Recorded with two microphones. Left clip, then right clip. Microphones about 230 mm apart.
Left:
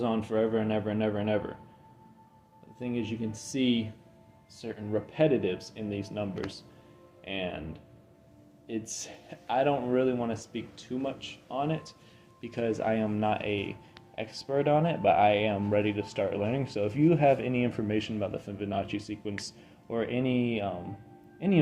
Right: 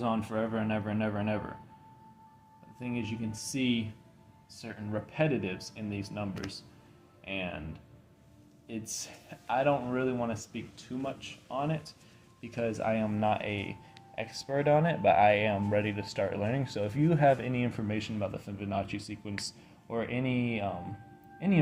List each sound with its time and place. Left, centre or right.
0.0 s speech: right
2.7 s speech: right